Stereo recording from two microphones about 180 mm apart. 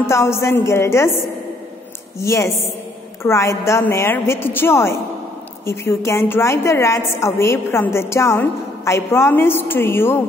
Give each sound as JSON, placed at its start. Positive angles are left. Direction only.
{"t": 0.0, "sound": "a woman's voice", "side_deg": 15}
{"t": 2.1, "sound": "a woman's voice", "side_deg": 15}